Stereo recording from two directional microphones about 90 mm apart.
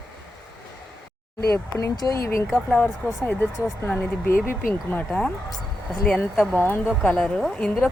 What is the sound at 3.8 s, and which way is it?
Speech, 25° left (ahead or behind).